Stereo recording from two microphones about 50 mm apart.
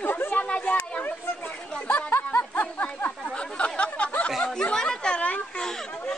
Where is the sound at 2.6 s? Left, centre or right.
Left.